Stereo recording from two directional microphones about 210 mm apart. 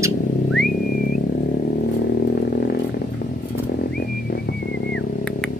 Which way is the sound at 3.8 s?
45° left (ahead or behind).